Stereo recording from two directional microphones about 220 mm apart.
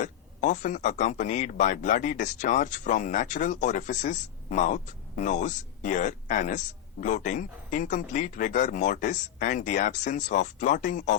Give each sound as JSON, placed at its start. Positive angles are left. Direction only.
{"t": 0.0, "sound": "speech", "side_deg": 35}